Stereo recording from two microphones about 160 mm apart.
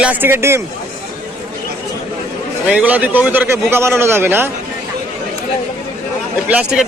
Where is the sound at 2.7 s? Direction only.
10° right (ahead or behind).